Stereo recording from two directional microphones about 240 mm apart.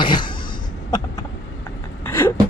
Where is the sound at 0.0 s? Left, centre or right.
Centre.